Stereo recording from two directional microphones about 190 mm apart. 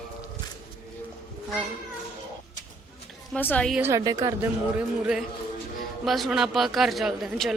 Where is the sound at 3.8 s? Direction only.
15° right (ahead or behind).